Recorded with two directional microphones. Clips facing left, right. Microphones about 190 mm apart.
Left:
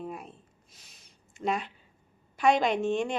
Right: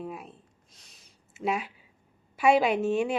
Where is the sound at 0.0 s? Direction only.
Centre (ahead or behind).